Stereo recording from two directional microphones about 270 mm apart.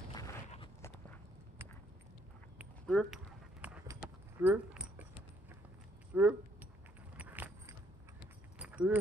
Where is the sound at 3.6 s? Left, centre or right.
Centre.